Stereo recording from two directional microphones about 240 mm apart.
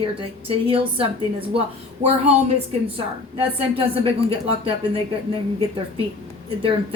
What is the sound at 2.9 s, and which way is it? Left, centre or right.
Speech, right.